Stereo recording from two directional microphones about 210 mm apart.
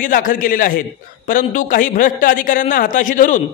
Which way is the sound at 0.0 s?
40° left (ahead or behind).